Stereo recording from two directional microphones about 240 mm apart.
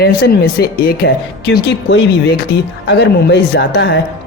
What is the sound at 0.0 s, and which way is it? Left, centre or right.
A man's voice, left.